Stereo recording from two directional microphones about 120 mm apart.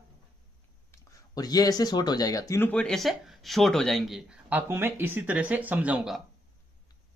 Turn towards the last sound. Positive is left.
turn(degrees=-15)  # may be behind; listen again after turning